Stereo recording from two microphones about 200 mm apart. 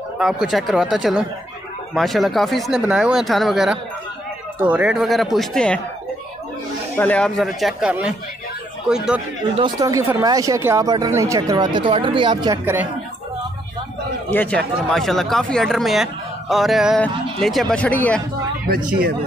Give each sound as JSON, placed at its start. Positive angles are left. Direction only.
{"t": 0.2, "sound": "speech", "side_deg": 0}
{"t": 7.0, "sound": "speech", "side_deg": 5}
{"t": 9.6, "sound": "speech", "side_deg": -15}
{"t": 14.3, "sound": "speech", "side_deg": 10}